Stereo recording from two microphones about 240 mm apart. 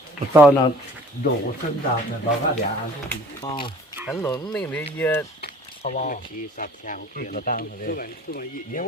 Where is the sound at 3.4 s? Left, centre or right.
Centre.